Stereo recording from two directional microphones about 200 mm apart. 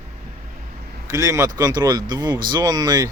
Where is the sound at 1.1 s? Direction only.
15° right (ahead or behind).